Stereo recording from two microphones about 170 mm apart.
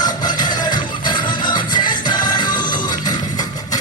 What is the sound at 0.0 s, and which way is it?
Music, 25° left (ahead or behind).